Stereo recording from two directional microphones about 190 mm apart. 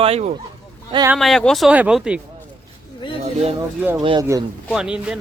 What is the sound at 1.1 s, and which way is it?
Speech, centre (ahead or behind).